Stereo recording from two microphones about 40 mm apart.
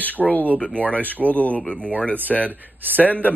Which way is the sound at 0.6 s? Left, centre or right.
Left.